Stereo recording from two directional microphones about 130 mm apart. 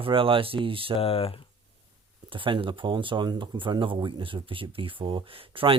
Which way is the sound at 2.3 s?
40° right (ahead or behind).